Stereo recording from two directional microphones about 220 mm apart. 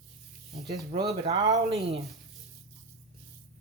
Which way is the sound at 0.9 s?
25° right (ahead or behind).